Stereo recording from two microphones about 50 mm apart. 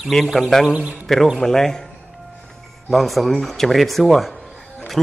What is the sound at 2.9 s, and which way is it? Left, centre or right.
Speech, centre.